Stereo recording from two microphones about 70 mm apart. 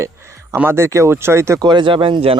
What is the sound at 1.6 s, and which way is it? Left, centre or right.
Speech, right.